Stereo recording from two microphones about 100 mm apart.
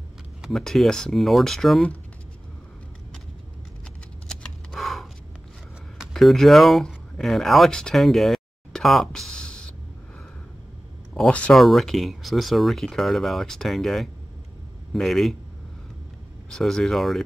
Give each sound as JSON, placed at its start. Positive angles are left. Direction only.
{"t": 0.4, "sound": "speech", "side_deg": 0}
{"t": 4.3, "sound": "scissors", "side_deg": 5}
{"t": 5.9, "sound": "speech", "side_deg": 0}
{"t": 11.1, "sound": "a man's voice", "side_deg": 10}
{"t": 16.4, "sound": "speech", "side_deg": 5}